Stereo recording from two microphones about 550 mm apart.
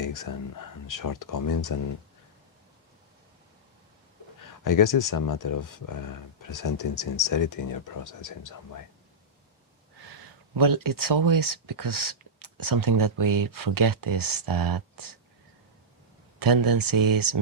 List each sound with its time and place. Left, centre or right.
0.0 s speech: left
4.6 s speech: left
10.6 s speech: right
16.4 s speech: right